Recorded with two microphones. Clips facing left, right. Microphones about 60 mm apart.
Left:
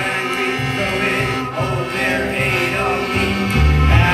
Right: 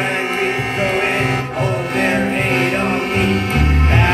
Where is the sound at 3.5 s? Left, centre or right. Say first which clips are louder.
Right 1 dB; right.